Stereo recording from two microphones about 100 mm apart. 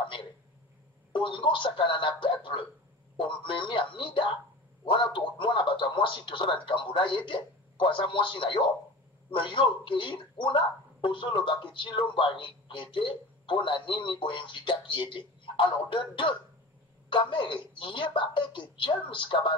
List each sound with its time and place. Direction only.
1.1 s speech: 55° left (ahead or behind)